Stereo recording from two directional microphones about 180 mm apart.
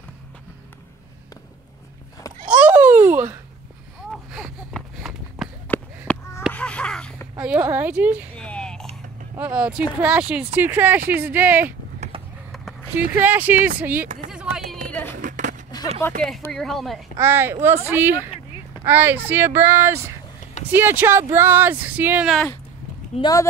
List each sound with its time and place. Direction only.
2.4 s babbling: 5° right (ahead or behind)
4.1 s a sound: centre (ahead or behind)
5.7 s a sound: 10° left (ahead or behind)
7.3 s a woman's voice: 10° right (ahead or behind)
8.4 s a sound: 5° left (ahead or behind)
9.4 s speech: 5° right (ahead or behind)
12.9 s speech: 10° right (ahead or behind)
14.3 s run: 5° right (ahead or behind)
14.9 s a sound: 10° left (ahead or behind)
15.1 s skateboard: 45° right (ahead or behind)
16.2 s speech: centre (ahead or behind)
17.2 s speech: 15° right (ahead or behind)
23.1 s speech: 35° left (ahead or behind)